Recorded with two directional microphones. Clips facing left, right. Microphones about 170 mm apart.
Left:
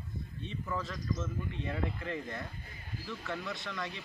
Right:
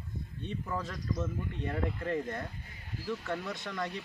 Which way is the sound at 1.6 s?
45° right (ahead or behind).